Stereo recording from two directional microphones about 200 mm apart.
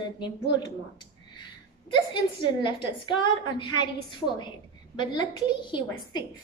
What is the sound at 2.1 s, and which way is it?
A woman's voice, 25° left (ahead or behind).